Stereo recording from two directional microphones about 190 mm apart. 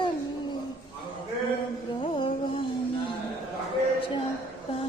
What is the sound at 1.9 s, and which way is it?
Music, 25° left (ahead or behind).